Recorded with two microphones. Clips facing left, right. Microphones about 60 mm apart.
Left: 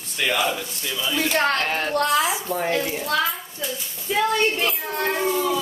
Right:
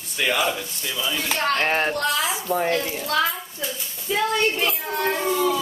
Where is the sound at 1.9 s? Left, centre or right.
Left.